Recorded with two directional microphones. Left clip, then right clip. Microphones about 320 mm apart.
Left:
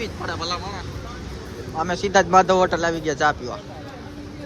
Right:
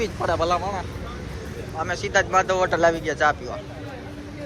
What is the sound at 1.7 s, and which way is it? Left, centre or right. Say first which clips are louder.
Speech: left 3 dB; centre.